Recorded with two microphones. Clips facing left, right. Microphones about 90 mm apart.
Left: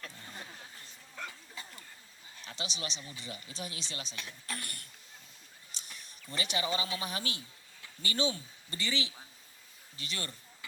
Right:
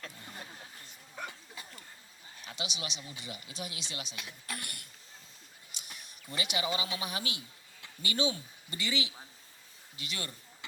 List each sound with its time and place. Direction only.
2.4 s speech: 35° left (ahead or behind)
5.7 s a sound: 35° left (ahead or behind)
6.3 s speech: 35° left (ahead or behind)